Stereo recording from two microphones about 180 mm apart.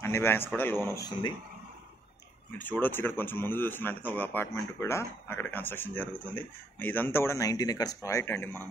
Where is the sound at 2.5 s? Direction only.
10° left (ahead or behind).